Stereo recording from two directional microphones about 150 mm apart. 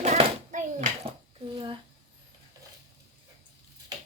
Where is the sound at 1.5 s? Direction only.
35° right (ahead or behind).